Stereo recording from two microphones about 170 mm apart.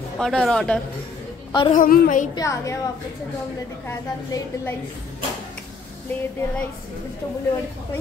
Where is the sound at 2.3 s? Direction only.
20° left (ahead or behind).